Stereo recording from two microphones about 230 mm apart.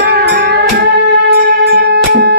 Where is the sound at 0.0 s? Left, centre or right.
Right.